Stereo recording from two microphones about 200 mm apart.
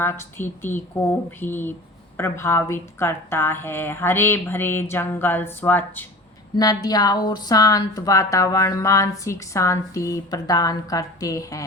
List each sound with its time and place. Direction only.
0.0 s a woman's voice: 10° left (ahead or behind)